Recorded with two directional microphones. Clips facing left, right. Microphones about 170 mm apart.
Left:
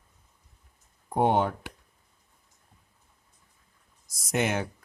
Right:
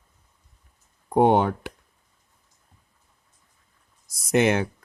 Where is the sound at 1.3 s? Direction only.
70° right (ahead or behind).